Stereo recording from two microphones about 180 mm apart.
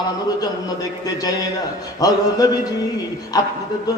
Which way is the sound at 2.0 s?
20° left (ahead or behind).